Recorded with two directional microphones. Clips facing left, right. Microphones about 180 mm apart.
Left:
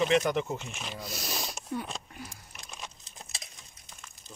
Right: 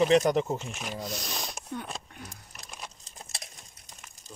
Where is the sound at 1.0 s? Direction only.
5° left (ahead or behind).